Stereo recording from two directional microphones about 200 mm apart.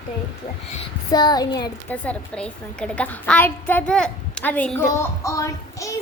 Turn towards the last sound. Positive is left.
turn(degrees=15)  # may be behind; listen again after turning